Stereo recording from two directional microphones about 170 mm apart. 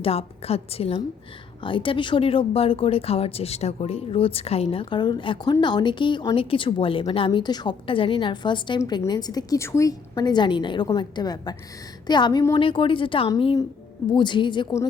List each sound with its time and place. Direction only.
0.0 s a woman's voice: 35° left (ahead or behind)